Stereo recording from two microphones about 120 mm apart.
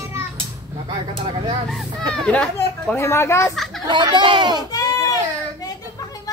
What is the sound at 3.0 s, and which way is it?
Speech, 20° left (ahead or behind).